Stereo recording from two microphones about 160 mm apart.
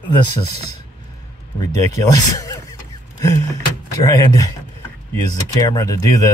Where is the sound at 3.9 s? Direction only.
20° left (ahead or behind).